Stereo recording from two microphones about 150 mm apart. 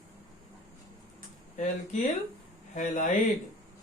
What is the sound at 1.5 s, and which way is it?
A man's voice, 55° left (ahead or behind).